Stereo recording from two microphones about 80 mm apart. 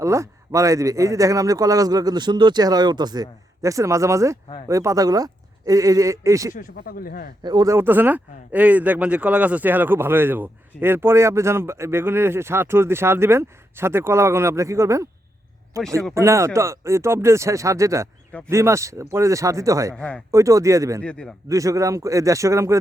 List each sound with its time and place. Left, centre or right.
0.0 s a man's voice: right
3.6 s a man's voice: right
7.4 s speech: right
7.7 s a man's voice: right
20.0 s a man's voice: centre
20.3 s speech: right
21.0 s a man's voice: centre
21.5 s speech: right